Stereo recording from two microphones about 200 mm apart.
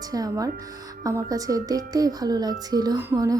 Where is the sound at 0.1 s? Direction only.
15° right (ahead or behind).